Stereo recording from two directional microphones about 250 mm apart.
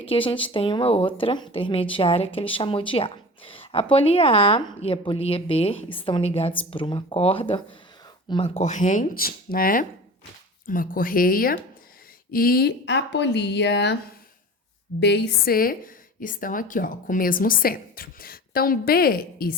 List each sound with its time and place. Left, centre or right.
0.1 s a woman's voice: left
15.0 s a woman's voice: left